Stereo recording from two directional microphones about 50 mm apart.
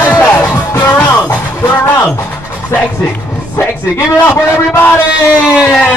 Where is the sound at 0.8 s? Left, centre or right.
Left.